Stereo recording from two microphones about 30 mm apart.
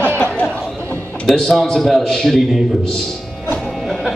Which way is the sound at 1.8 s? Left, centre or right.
Centre.